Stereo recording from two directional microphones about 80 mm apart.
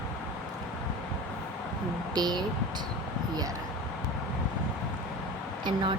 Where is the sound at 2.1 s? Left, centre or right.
Right.